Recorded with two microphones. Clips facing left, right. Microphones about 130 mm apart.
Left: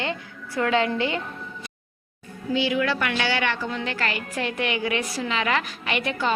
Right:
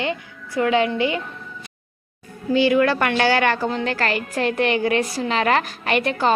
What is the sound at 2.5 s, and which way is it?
A woman's voice, 50° right (ahead or behind).